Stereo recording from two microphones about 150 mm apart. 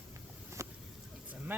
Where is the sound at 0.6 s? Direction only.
20° right (ahead or behind).